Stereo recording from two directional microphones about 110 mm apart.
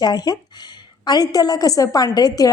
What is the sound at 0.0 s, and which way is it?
A woman's voice, 40° left (ahead or behind).